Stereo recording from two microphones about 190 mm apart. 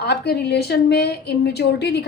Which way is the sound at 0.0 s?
60° left (ahead or behind).